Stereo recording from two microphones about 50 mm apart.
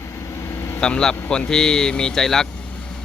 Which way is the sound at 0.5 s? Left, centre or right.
Left.